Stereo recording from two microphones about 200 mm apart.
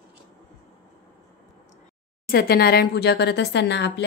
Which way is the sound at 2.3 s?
50° left (ahead or behind).